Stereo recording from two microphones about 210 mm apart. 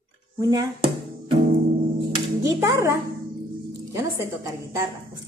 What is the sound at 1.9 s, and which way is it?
Music, 15° right (ahead or behind).